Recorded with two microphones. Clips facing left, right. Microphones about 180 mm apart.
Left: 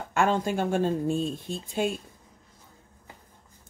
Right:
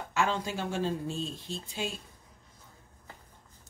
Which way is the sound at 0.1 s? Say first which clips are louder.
Left 6 dB; 50° left (ahead or behind).